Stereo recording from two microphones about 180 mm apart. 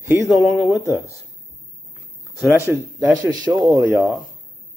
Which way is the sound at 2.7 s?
20° right (ahead or behind).